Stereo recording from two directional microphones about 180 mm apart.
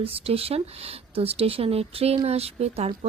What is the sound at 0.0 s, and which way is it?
A woman's voice, 30° right (ahead or behind).